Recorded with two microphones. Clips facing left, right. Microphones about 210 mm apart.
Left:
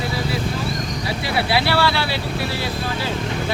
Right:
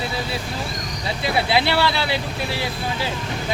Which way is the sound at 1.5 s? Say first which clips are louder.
Left 2 dB; 20° right (ahead or behind).